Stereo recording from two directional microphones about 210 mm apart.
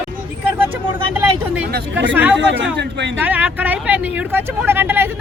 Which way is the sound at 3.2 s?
10° right (ahead or behind).